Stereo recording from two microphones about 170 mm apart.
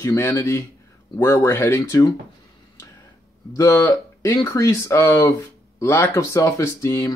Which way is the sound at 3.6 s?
15° left (ahead or behind).